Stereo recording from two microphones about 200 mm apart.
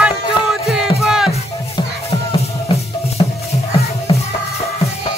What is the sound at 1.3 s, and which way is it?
Music, 30° left (ahead or behind).